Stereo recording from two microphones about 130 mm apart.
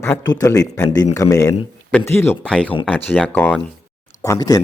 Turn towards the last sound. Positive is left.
turn(degrees=30)  # may be behind; listen again after turning